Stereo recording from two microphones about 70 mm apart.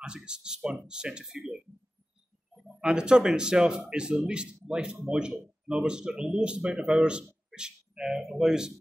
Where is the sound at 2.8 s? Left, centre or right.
Centre.